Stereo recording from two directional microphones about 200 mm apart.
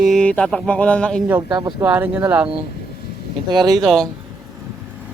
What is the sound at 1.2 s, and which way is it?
Speech, 15° right (ahead or behind).